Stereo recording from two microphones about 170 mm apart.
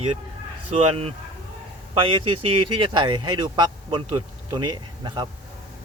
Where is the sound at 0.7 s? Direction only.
35° right (ahead or behind).